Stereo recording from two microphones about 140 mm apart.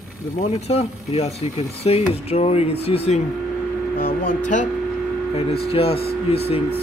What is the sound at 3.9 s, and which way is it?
Speech, 80° left.